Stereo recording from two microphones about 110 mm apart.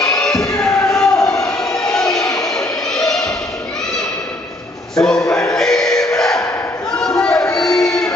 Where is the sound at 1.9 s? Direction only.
5° left (ahead or behind).